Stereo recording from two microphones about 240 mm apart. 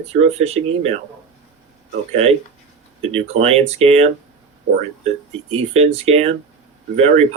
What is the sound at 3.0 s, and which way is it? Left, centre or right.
Speech, right.